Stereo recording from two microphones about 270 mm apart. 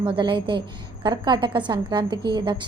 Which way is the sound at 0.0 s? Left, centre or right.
Centre.